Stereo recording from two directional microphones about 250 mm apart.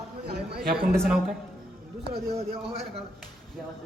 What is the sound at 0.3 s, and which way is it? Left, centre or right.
Speech, right.